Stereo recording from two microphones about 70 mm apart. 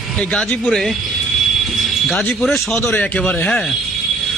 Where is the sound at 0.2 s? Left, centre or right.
Centre.